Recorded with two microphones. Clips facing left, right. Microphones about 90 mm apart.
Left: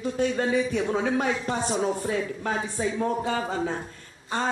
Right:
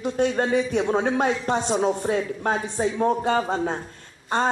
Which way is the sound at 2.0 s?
55° right (ahead or behind).